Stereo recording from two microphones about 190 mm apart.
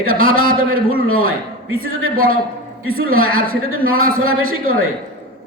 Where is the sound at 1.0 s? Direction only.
90° right.